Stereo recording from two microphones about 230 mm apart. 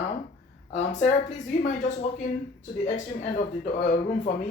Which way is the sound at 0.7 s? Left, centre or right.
Left.